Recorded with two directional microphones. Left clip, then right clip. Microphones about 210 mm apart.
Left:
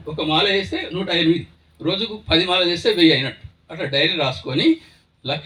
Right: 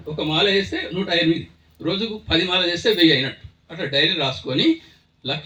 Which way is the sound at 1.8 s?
30° left (ahead or behind).